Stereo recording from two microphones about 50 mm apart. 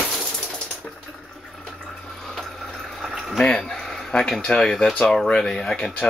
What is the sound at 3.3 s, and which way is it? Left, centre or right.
Speech, centre.